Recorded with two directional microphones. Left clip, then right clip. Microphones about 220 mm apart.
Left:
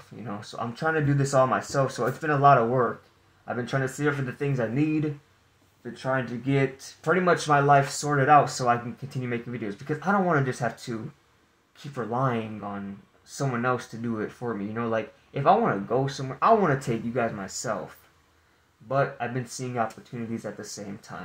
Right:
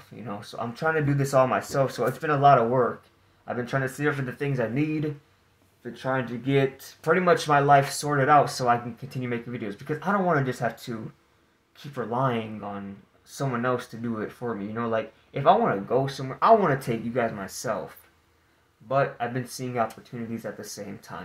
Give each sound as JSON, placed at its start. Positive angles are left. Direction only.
{"t": 0.2, "sound": "speech", "side_deg": 0}
{"t": 6.6, "sound": "speech", "side_deg": -5}
{"t": 18.9, "sound": "speech", "side_deg": 5}